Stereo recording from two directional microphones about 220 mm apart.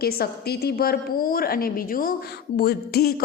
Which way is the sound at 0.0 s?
45° left (ahead or behind).